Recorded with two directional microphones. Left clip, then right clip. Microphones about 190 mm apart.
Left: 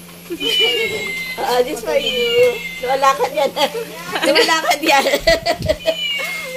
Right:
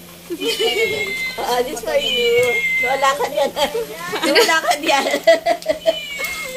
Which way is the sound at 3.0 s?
30° left (ahead or behind).